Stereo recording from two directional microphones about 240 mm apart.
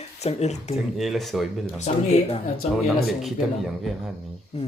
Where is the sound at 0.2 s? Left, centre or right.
Left.